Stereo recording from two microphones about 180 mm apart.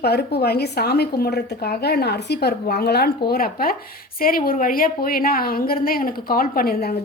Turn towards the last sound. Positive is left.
turn(degrees=55)  # may be behind; listen again after turning